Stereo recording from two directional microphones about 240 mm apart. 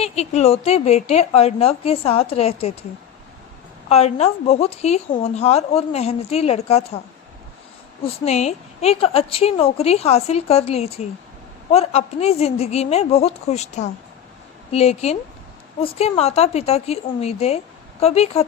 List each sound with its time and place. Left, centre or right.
0.0 s speech: left
3.8 s speech: left
8.0 s speech: left